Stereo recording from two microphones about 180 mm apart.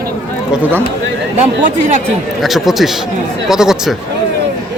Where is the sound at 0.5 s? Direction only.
10° right (ahead or behind).